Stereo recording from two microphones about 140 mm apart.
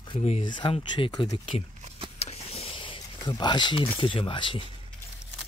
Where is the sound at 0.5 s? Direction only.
35° left (ahead or behind).